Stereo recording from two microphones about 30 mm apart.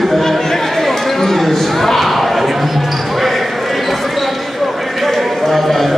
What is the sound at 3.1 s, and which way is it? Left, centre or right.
Basketball bounce, centre.